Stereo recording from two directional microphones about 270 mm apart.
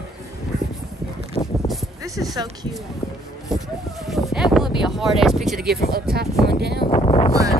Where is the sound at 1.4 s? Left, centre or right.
Left.